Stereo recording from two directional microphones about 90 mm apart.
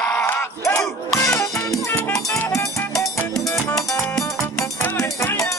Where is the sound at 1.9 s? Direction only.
20° left (ahead or behind).